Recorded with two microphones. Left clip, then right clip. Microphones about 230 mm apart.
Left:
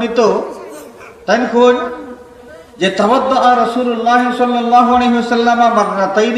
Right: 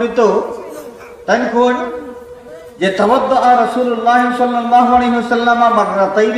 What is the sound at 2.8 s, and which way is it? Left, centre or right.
A man's voice, left.